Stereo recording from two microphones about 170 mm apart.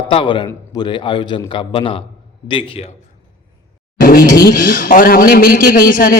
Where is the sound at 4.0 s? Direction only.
60° left (ahead or behind).